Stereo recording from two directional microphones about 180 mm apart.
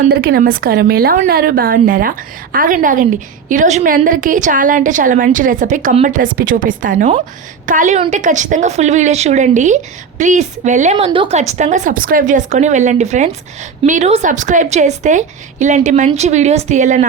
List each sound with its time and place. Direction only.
0.1 s a woman's voice: 60° right (ahead or behind); by 10.9 s 40° right (ahead or behind)
10.9 s speech: 25° right (ahead or behind)
11.3 s a woman's voice: 40° right (ahead or behind)